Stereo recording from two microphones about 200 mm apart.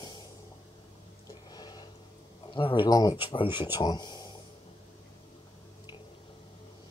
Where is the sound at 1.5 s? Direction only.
20° left (ahead or behind).